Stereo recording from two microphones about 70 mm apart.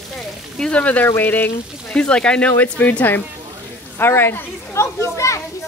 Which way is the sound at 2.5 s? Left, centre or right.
Left.